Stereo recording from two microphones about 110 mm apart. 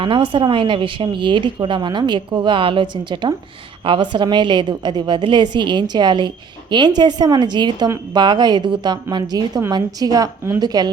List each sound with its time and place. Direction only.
0.0 s a woman's voice: 50° right (ahead or behind)